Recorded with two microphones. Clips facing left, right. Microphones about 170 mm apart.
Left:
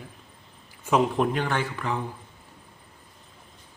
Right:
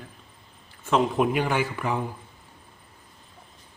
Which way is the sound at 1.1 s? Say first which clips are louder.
Right 2 dB; 10° right (ahead or behind).